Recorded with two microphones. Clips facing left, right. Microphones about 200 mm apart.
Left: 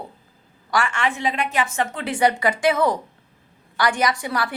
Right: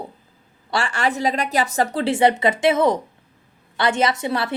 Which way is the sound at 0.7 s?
35° right (ahead or behind).